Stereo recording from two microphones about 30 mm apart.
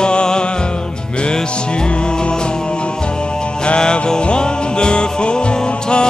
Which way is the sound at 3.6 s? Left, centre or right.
Left.